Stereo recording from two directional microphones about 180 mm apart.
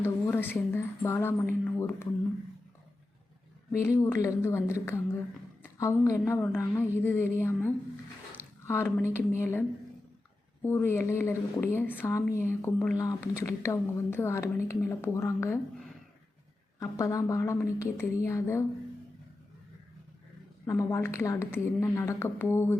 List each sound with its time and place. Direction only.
0.0 s speech: 10° left (ahead or behind)
3.7 s speech: 15° left (ahead or behind)
5.6 s a sound: 15° left (ahead or behind)
6.1 s speech: 15° left (ahead or behind)
16.8 s speech: 20° left (ahead or behind)
20.7 s speech: 15° left (ahead or behind)